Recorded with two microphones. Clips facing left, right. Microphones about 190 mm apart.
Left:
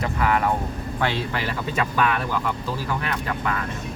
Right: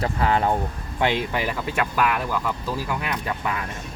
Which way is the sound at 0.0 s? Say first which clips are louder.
Right 1 dB; 30° right (ahead or behind).